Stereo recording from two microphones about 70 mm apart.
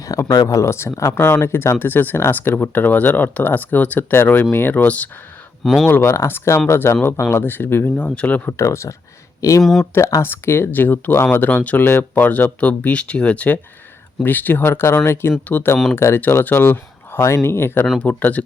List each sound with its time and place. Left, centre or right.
0.4 s speech: left
1.1 s speech: left
5.6 s speech: centre
5.9 s speech: left
7.9 s speech: centre
8.4 s speech: left
10.2 s speech: left
16.0 s speech: left
16.2 s speech: left
18.0 s speech: left